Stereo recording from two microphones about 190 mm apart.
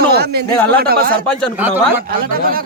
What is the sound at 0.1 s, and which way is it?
Speech, 55° right (ahead or behind).